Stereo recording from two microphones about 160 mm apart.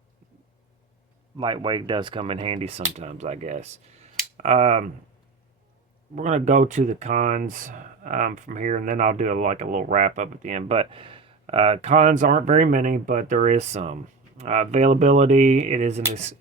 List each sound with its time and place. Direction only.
1.4 s speech: 30° right (ahead or behind); by 4.9 s 45° right (ahead or behind)
6.1 s speech: 45° right (ahead or behind)